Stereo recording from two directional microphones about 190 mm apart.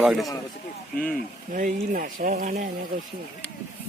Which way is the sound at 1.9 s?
45° right (ahead or behind).